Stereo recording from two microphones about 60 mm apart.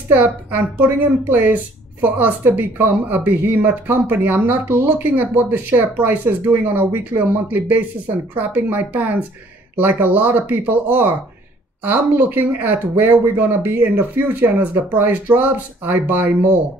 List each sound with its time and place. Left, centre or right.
0.1 s a woman's voice: right